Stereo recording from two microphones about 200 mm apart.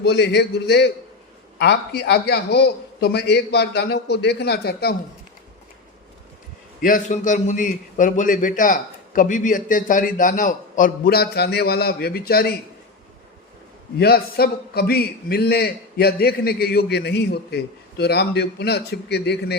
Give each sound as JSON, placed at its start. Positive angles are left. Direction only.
{"t": 0.0, "sound": "a man's voice", "side_deg": 55}
{"t": 6.8, "sound": "a man's voice", "side_deg": 40}
{"t": 14.0, "sound": "a man's voice", "side_deg": 50}